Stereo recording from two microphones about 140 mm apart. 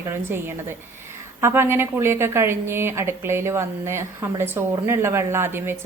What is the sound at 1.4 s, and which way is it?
A woman's voice, 20° right (ahead or behind).